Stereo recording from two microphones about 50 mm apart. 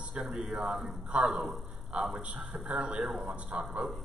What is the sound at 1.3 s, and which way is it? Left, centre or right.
Speech, centre.